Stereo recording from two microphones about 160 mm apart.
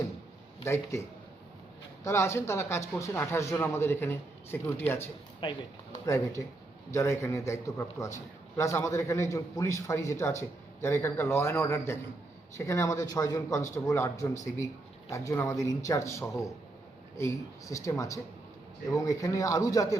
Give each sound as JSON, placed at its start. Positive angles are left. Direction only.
{"t": 0.6, "sound": "speech", "side_deg": 20}
{"t": 2.0, "sound": "speech", "side_deg": 15}
{"t": 5.4, "sound": "a man's voice", "side_deg": 25}